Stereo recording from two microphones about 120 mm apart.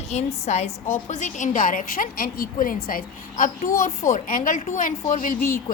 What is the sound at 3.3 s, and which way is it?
A child's voice, 90° left.